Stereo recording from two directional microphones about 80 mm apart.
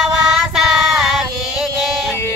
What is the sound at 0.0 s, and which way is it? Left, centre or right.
Child singing, centre.